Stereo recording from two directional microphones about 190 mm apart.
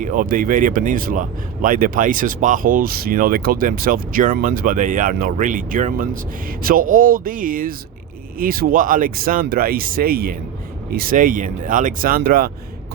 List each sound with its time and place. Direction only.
0.0 s speech: 45° right (ahead or behind)